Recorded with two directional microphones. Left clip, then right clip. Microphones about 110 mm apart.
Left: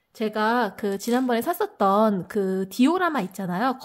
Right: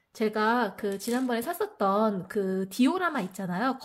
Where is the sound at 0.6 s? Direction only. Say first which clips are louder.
Left 4 dB; 40° left (ahead or behind).